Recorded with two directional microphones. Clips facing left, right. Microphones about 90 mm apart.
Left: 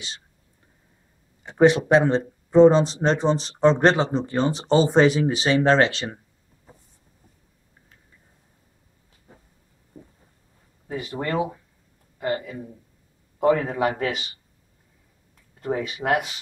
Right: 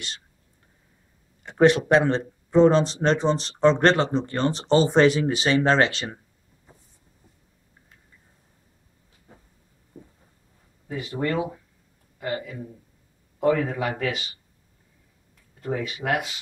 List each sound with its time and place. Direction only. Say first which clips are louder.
1.4 s speech: left 1 dB; 5° left (ahead or behind)
10.9 s a man's voice: even; 30° left (ahead or behind)
13.4 s a man's voice: left 2 dB; 35° left (ahead or behind)
15.6 s a man's voice: left 2 dB; 30° left (ahead or behind)